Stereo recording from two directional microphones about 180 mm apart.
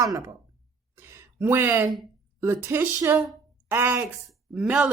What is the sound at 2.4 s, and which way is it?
A woman's voice, 10° right (ahead or behind).